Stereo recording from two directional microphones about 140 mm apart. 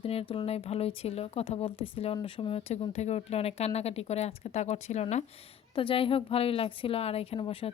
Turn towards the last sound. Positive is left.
turn(degrees=40)  # may be behind; listen again after turning